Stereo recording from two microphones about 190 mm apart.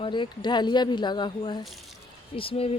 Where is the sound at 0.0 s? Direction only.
25° left (ahead or behind).